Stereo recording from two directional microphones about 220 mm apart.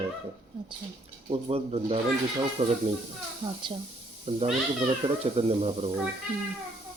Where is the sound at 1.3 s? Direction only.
25° right (ahead or behind).